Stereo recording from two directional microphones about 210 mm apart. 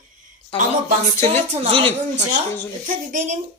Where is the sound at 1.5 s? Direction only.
25° right (ahead or behind).